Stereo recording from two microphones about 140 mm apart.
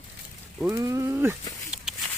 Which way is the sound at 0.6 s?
20° right (ahead or behind).